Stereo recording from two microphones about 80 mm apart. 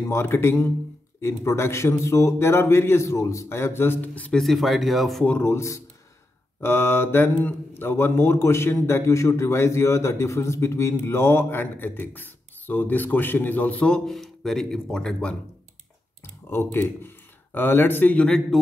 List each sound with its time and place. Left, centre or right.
0.1 s a man's voice: left; by 4.4 s centre
4.4 s speech: centre
5.4 s a man's voice: left; by 15.3 s centre
16.4 s speech: left
18.2 s speech: centre